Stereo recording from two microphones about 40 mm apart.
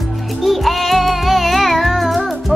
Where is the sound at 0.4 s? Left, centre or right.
Centre.